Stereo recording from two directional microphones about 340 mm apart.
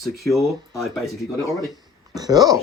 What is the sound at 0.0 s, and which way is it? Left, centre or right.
Speech, centre.